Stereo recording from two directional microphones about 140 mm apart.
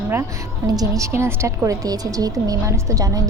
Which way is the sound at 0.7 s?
25° right (ahead or behind).